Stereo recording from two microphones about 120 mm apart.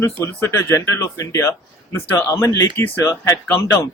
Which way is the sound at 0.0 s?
20° left (ahead or behind).